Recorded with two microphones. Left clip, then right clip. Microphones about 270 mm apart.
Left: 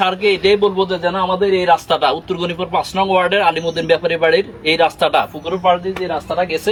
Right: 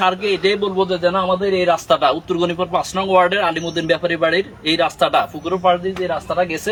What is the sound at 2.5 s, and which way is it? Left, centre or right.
A man's voice, centre.